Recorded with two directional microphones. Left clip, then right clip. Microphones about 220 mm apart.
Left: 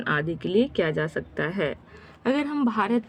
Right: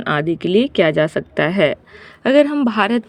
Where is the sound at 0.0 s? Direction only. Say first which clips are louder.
Right 8 dB; 35° right (ahead or behind).